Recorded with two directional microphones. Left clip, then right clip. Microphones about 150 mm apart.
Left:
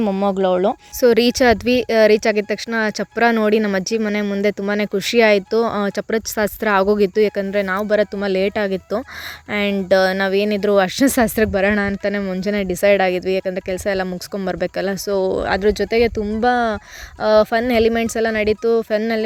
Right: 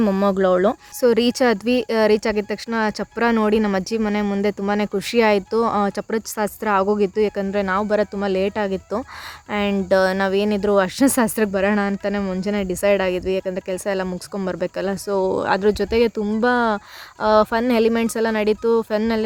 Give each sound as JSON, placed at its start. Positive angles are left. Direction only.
{"t": 0.0, "sound": "speech", "side_deg": 5}
{"t": 1.0, "sound": "speech", "side_deg": 20}